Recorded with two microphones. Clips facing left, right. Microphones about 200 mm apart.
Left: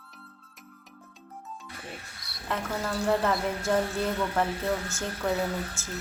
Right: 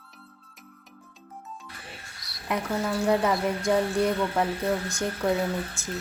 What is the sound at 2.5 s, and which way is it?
A woman's voice, 15° right (ahead or behind).